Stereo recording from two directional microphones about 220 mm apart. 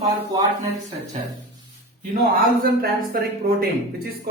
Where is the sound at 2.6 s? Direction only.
40° right (ahead or behind).